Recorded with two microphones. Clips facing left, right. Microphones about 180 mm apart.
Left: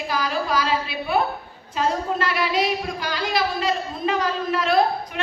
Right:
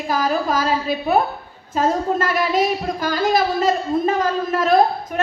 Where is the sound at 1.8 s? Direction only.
45° right (ahead or behind).